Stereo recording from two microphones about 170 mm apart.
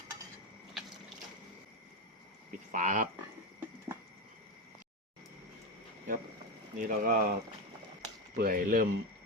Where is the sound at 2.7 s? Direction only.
50° right (ahead or behind).